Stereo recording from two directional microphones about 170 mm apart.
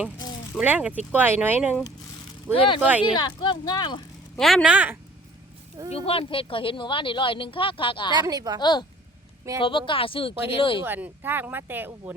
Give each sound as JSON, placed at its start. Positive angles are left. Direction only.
{"t": 0.6, "sound": "speech", "side_deg": -10}
{"t": 2.5, "sound": "speech", "side_deg": 30}
{"t": 4.4, "sound": "speech", "side_deg": 0}
{"t": 5.9, "sound": "speech", "side_deg": 35}
{"t": 8.1, "sound": "a woman's voice", "side_deg": -25}
{"t": 8.6, "sound": "speech", "side_deg": 25}
{"t": 10.8, "sound": "speech", "side_deg": -10}